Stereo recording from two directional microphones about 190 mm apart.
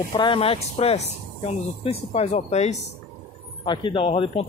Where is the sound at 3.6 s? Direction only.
25° left (ahead or behind).